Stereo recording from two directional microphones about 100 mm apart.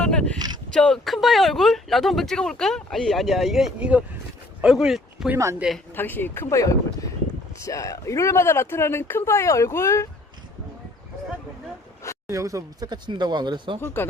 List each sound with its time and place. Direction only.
0.0 s a sound: 10° left (ahead or behind)
0.3 s speech: 45° right (ahead or behind)
0.7 s speech: 5° left (ahead or behind)
3.8 s speech: 15° right (ahead or behind)
5.9 s speech: 20° left (ahead or behind)
12.3 s speech: 30° right (ahead or behind)
12.9 s speech: 45° right (ahead or behind)
13.8 s speech: 20° left (ahead or behind)